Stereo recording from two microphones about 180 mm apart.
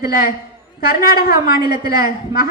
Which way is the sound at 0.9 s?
55° left (ahead or behind).